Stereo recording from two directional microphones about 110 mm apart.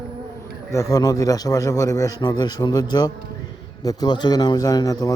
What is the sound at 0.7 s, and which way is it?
A man's voice, 30° left (ahead or behind).